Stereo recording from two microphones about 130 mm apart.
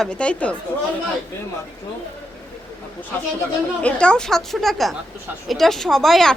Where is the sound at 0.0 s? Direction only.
10° left (ahead or behind).